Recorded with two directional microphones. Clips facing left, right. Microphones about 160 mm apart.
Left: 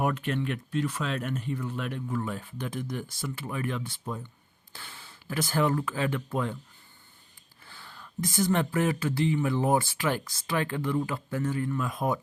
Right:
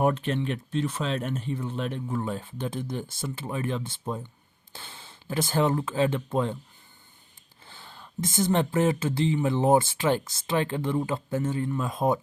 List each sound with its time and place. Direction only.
0.0 s speech: 30° right (ahead or behind)
7.6 s speech: 25° right (ahead or behind)